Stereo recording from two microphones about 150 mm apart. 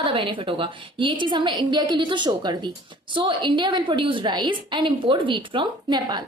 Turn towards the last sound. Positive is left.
turn(degrees=-30)  # may be behind; listen again after turning